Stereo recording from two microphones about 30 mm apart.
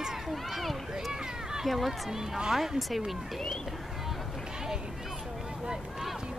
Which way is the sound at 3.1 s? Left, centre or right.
Centre.